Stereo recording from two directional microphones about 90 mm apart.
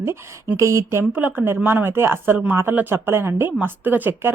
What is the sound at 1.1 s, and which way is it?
Speech, 20° right (ahead or behind).